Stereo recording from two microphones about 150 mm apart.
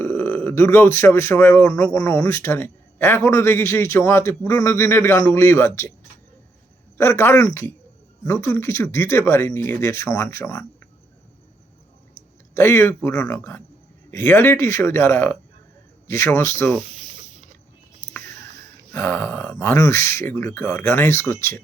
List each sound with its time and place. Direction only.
0.0 s speech: 15° left (ahead or behind)
6.9 s speech: 15° left (ahead or behind)
12.5 s speech: 15° left (ahead or behind)
18.9 s speech: 10° left (ahead or behind)